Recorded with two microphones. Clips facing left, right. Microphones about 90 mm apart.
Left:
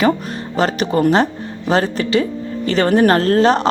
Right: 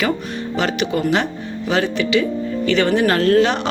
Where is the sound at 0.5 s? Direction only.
40° left (ahead or behind).